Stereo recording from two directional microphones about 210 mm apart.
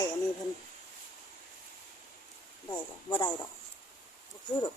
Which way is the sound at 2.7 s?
20° left (ahead or behind).